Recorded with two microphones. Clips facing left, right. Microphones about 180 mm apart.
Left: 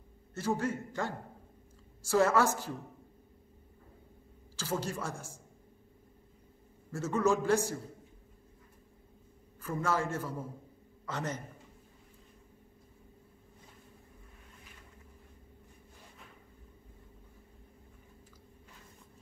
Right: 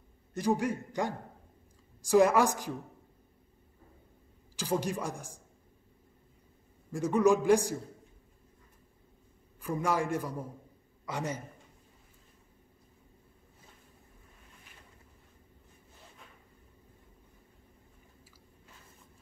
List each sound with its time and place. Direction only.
0.3 s a man's voice: 15° right (ahead or behind)
4.6 s a man's voice: 15° right (ahead or behind)
6.9 s a man's voice: 15° right (ahead or behind)
9.6 s a man's voice: 15° right (ahead or behind)